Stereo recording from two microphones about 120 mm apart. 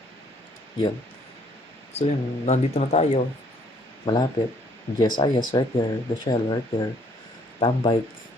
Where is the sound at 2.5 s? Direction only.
60° left (ahead or behind).